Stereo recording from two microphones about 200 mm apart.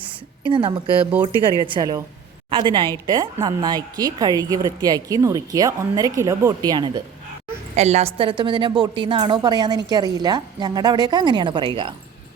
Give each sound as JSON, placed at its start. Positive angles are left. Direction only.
{"t": 0.4, "sound": "a woman's voice", "side_deg": -25}
{"t": 7.8, "sound": "speech", "side_deg": -30}